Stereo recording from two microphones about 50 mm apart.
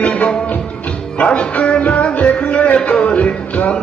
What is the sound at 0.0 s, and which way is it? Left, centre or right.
Music, left.